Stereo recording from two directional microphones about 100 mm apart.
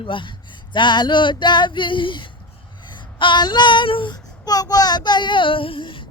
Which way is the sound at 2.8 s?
50° left (ahead or behind).